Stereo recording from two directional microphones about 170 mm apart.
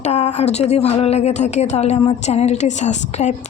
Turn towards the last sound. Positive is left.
turn(degrees=45)  # may be behind; listen again after turning